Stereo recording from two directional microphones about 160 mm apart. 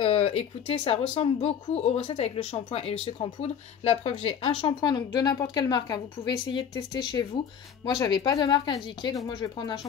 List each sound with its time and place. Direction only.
0.0 s speech: 40° left (ahead or behind)